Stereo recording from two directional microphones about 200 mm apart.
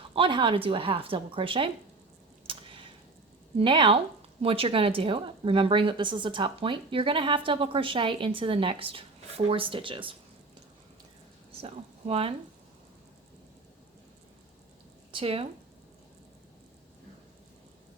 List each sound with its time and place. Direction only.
0.1 s a woman's voice: 25° right (ahead or behind)
2.5 s typing: 25° right (ahead or behind)
3.6 s a woman's voice: 25° right (ahead or behind)
11.6 s speech: 30° right (ahead or behind)
15.1 s speech: 30° right (ahead or behind)